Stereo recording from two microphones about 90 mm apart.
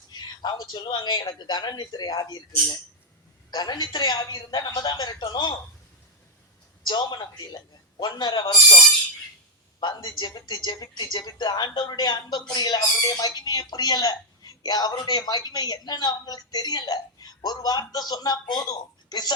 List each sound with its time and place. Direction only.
0.1 s a man's voice: 50° left (ahead or behind)
3.5 s speech: 50° left (ahead or behind)
6.8 s speech: 55° left (ahead or behind)
9.8 s speech: 50° left (ahead or behind)